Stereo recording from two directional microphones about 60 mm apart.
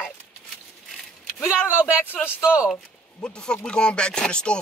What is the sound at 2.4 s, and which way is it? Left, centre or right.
Speech, centre.